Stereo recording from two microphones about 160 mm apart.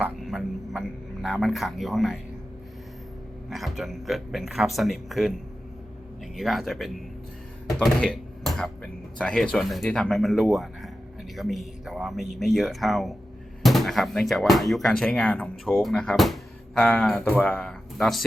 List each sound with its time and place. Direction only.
0.2 s a sound: centre (ahead or behind)
3.5 s speech: centre (ahead or behind)
6.3 s speech: centre (ahead or behind)